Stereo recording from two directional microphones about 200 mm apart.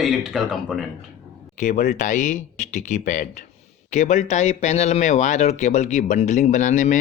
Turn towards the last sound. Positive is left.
turn(degrees=40)  # may be behind; listen again after turning